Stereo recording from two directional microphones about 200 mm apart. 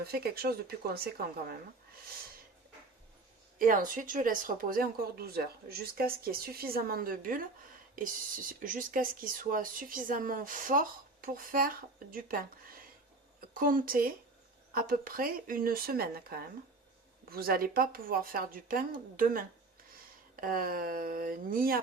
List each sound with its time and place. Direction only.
0.0 s speech: 50° right (ahead or behind)
3.6 s speech: 45° right (ahead or behind)
13.5 s speech: 45° right (ahead or behind)